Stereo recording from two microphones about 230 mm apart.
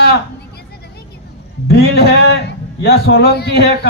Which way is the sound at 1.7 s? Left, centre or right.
Left.